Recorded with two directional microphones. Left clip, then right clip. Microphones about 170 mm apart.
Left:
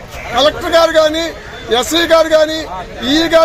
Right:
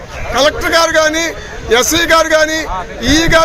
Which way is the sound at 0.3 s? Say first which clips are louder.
Even; 30° right (ahead or behind).